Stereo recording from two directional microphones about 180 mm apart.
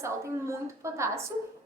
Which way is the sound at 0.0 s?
15° right (ahead or behind).